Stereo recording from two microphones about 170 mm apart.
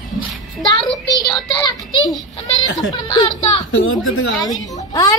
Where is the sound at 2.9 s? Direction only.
25° left (ahead or behind).